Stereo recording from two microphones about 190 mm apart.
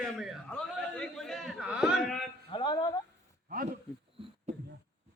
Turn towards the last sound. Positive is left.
turn(degrees=-35)  # may be behind; listen again after turning